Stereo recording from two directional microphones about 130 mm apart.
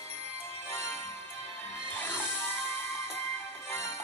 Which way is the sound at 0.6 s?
20° left (ahead or behind).